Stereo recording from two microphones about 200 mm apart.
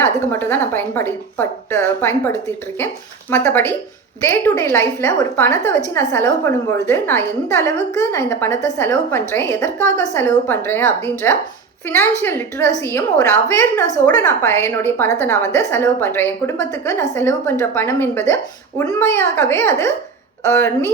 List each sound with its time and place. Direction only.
0.0 s a woman's voice: 10° left (ahead or behind)